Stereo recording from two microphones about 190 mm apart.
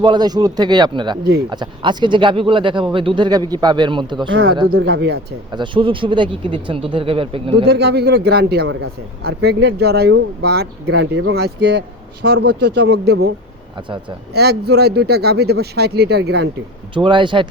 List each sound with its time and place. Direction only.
0.0 s speech: 20° right (ahead or behind)
4.3 s speech: 75° right (ahead or behind)
5.5 s speech: 25° right (ahead or behind)
7.7 s a man's voice: 60° right (ahead or behind); by 11.4 s 80° right
11.4 s a man's voice: 65° right (ahead or behind)
13.7 s speech: 25° right (ahead or behind)
14.3 s a man's voice: 60° right (ahead or behind)
16.9 s speech: 25° right (ahead or behind)